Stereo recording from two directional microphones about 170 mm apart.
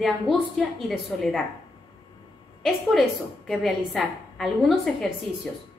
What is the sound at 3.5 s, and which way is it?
A woman's voice, centre (ahead or behind).